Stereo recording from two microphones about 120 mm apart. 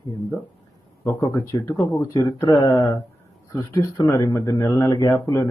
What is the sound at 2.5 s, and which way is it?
Speech, 40° left (ahead or behind).